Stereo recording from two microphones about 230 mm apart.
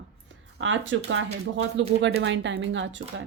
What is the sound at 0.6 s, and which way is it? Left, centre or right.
A woman's voice, right.